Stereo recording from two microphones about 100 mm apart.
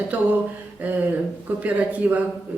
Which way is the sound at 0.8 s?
15° right (ahead or behind).